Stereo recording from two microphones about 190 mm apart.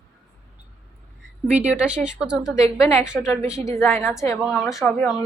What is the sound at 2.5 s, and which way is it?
A woman's voice, 15° left (ahead or behind).